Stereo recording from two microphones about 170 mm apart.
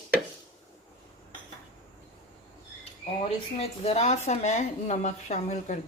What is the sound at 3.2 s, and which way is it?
Speech, 35° left (ahead or behind).